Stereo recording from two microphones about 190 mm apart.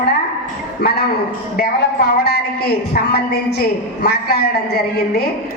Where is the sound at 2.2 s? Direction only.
55° left (ahead or behind).